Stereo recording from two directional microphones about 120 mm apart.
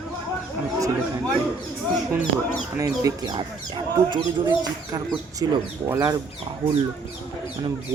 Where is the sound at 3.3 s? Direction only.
45° right (ahead or behind).